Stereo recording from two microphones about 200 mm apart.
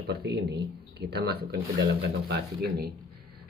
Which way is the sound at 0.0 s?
55° right (ahead or behind).